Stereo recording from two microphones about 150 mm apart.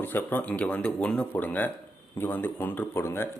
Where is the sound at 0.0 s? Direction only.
15° left (ahead or behind).